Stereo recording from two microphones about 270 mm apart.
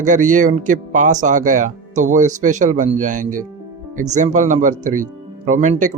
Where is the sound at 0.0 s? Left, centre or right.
Right.